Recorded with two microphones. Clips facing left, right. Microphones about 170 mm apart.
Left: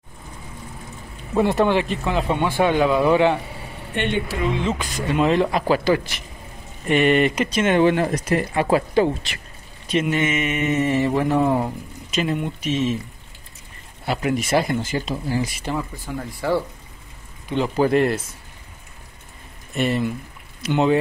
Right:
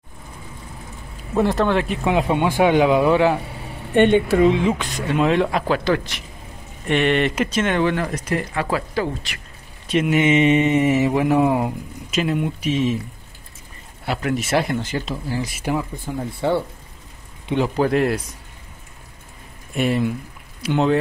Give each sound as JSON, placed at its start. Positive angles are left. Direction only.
{"t": 1.3, "sound": "speech", "side_deg": 0}
{"t": 2.0, "sound": "speech", "side_deg": -15}
{"t": 3.0, "sound": "speech", "side_deg": -5}
{"t": 4.7, "sound": "speech", "side_deg": 0}
{"t": 7.5, "sound": "speech", "side_deg": 20}
{"t": 9.8, "sound": "speech", "side_deg": -5}
{"t": 10.2, "sound": "speech", "side_deg": -20}
{"t": 14.0, "sound": "speech", "side_deg": 0}
{"t": 15.6, "sound": "speech", "side_deg": -15}
{"t": 16.3, "sound": "speech", "side_deg": -25}
{"t": 17.7, "sound": "speech", "side_deg": 0}
{"t": 19.7, "sound": "speech", "side_deg": 0}